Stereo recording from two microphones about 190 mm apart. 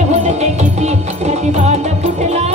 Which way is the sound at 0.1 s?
35° right (ahead or behind).